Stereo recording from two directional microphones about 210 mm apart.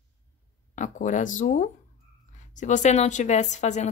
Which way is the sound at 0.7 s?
35° left (ahead or behind).